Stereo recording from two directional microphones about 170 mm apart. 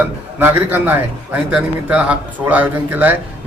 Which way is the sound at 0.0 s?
10° right (ahead or behind).